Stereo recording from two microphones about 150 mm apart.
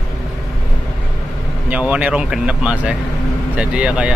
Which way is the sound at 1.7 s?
10° right (ahead or behind).